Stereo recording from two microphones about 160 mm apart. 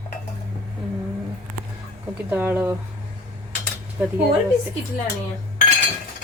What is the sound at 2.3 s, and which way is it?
Speech, 10° right (ahead or behind).